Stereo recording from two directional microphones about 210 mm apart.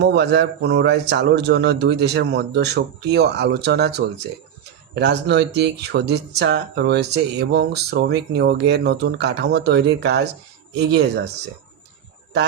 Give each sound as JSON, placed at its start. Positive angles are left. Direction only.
{"t": 0.0, "sound": "speech", "side_deg": -55}